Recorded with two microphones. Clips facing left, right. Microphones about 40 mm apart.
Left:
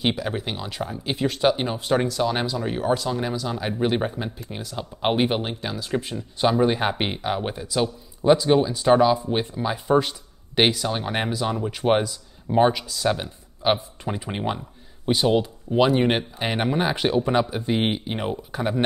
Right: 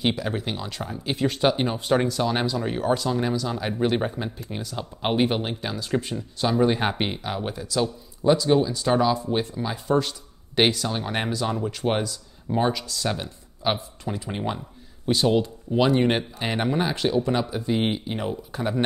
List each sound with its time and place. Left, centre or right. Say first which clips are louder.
0.0 s speech: even; centre
7.2 s speech: left 3 dB; centre
12.8 s speech: left 4 dB; centre